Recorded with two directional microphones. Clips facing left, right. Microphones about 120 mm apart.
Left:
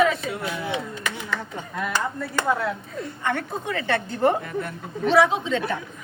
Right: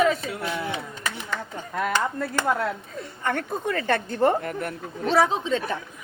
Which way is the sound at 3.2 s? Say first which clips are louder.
Right 1 dB; 45° right (ahead or behind).